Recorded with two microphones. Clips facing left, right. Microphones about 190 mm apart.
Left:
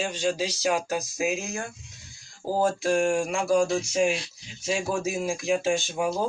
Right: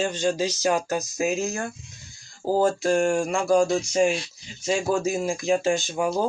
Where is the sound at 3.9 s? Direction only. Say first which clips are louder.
Right 3 dB; 5° left (ahead or behind).